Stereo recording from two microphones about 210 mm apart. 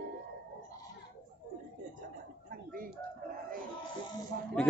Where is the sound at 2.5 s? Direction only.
45° right (ahead or behind).